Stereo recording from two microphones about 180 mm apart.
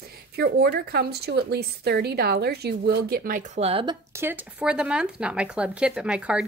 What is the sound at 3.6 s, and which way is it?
Speech, 30° right (ahead or behind).